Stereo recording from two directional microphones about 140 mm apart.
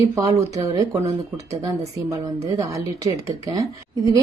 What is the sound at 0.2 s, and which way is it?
A woman's voice, 25° right (ahead or behind).